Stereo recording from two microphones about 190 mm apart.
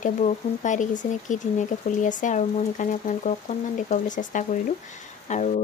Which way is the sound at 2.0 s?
40° left (ahead or behind).